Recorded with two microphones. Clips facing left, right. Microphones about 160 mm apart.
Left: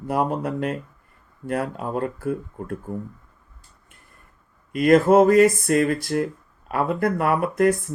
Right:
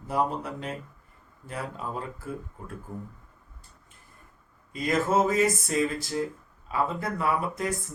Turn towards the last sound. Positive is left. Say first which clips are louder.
# left 8 dB
turn(degrees=60)  # may be behind; listen again after turning